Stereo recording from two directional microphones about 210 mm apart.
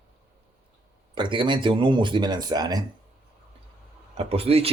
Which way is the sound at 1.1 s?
25° right (ahead or behind).